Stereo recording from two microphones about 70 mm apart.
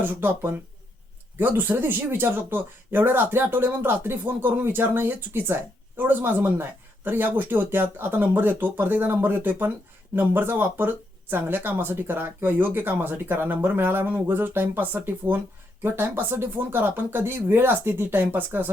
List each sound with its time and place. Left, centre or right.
0.0 s speech: right